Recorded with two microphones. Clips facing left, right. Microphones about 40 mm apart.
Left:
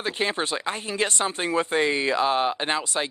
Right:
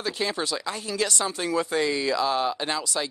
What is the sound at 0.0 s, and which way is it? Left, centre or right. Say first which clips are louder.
Speech: left 2 dB; left.